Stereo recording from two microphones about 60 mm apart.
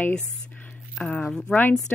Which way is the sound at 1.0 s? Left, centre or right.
Left.